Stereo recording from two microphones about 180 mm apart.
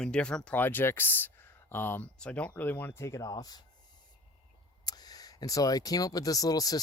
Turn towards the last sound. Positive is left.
turn(degrees=20)  # may be behind; listen again after turning